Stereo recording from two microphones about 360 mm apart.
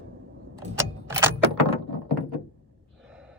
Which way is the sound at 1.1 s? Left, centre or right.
Centre.